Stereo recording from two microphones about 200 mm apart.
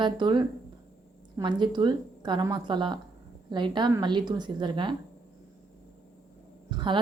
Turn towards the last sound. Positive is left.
turn(degrees=-25)  # may be behind; listen again after turning